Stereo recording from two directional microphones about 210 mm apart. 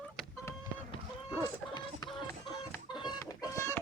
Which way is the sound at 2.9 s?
20° left (ahead or behind).